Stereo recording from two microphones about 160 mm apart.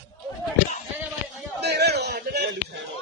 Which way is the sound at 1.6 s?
90° right.